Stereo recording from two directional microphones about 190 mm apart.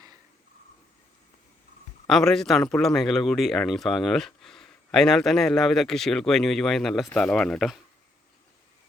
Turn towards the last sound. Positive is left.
turn(degrees=0)  # may be behind; listen again after turning